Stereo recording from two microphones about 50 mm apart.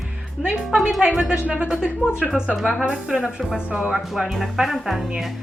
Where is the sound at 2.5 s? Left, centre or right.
Centre.